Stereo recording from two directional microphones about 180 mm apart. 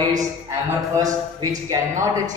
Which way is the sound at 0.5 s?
20° right (ahead or behind).